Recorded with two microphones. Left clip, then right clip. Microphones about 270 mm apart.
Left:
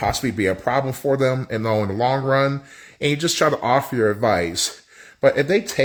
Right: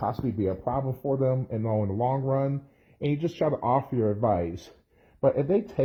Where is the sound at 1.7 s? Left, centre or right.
Left.